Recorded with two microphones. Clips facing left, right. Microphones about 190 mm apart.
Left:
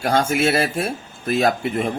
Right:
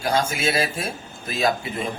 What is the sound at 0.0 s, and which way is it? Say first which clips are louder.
Speech: left 4 dB; 65° left (ahead or behind).